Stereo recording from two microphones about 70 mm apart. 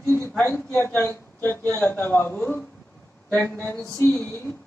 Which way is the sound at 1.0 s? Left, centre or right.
Left.